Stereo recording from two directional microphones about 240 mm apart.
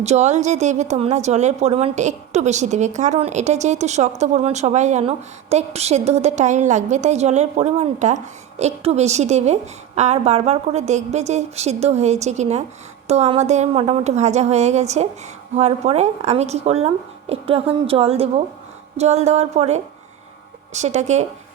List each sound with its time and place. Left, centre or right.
0.0 s a woman's voice: right